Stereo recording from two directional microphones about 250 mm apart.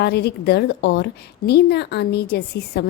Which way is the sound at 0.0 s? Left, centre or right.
Left.